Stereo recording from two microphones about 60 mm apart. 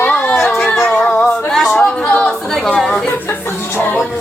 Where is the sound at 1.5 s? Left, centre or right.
Centre.